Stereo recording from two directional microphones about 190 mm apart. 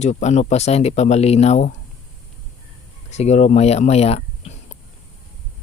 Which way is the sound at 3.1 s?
35° left (ahead or behind).